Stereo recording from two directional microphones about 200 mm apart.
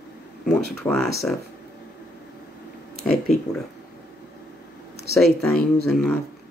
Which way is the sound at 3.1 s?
Centre (ahead or behind).